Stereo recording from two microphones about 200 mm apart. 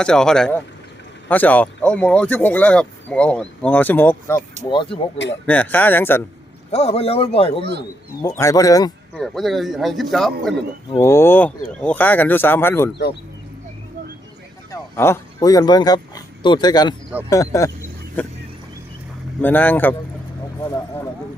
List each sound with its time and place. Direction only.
0.0 s speech: 5° left (ahead or behind)
4.7 s speech: 25° left (ahead or behind)
5.1 s speech: 65° left (ahead or behind)
5.5 s speech: 10° left (ahead or behind)
6.7 s a man's voice: 30° left (ahead or behind)
7.6 s speech: 55° right (ahead or behind)
8.4 s speech: 15° left (ahead or behind)
9.1 s speech: centre (ahead or behind)
11.0 s speech: 10° left (ahead or behind)
14.7 s speech: 10° left (ahead or behind)
19.4 s speech: 10° left (ahead or behind)